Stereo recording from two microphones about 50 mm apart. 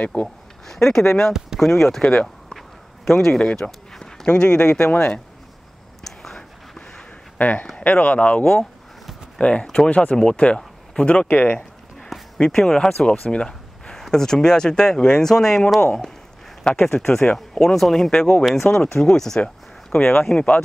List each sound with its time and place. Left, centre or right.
0.7 s speech: centre
3.9 s a sound: centre
4.3 s speech: centre
6.0 s a sound: centre
7.3 s speech: left
11.2 s speech: left
12.4 s speech: centre
13.3 s a sound: centre
14.0 s speech: centre
17.7 s speech: centre